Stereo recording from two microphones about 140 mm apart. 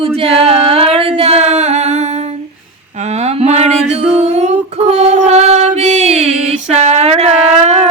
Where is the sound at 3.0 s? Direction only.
50° right (ahead or behind).